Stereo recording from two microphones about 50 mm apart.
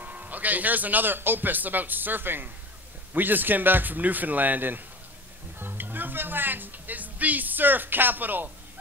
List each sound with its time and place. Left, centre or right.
0.0 s speech: right
5.6 s music: right